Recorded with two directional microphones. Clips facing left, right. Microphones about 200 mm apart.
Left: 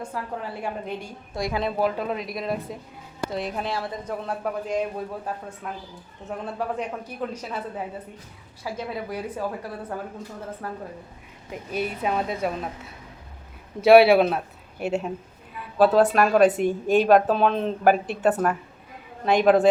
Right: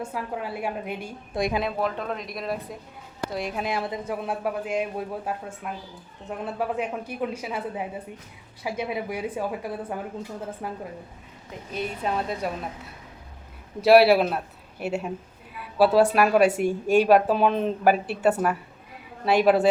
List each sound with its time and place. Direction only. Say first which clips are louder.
0.0 s a woman's voice: right 1 dB; 10° right (ahead or behind)
1.4 s speech: right 2 dB; 20° right (ahead or behind)
1.6 s a woman's voice: left 3 dB; 5° left (ahead or behind); by 10.8 s 15° right (ahead or behind)
11.7 s speech: left 2 dB; 5° left (ahead or behind)
13.8 s a woman's voice: left 2 dB; centre (ahead or behind)